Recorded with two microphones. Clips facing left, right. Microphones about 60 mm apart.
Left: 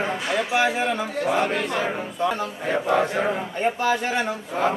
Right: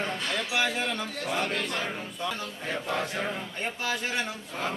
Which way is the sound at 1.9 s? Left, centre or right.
Left.